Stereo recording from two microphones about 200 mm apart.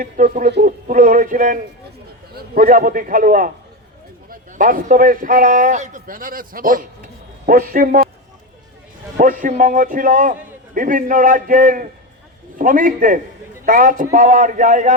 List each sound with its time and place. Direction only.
0.0 s a man's voice: 45° right (ahead or behind)
9.1 s a man's voice: 40° right (ahead or behind)